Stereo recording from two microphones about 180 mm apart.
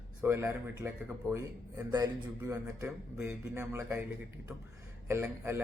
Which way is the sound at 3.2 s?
10° right (ahead or behind).